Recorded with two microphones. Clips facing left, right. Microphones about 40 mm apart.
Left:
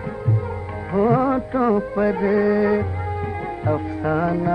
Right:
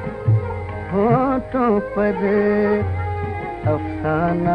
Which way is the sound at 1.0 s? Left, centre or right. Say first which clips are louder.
Right 1 dB; centre.